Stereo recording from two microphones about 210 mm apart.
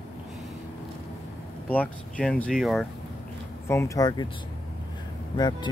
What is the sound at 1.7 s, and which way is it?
Speech, 5° left (ahead or behind).